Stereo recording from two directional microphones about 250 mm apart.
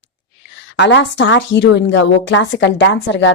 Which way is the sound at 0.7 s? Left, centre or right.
Left.